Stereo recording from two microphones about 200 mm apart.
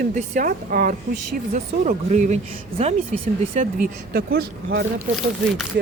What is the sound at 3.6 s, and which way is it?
Speech, 45° right (ahead or behind).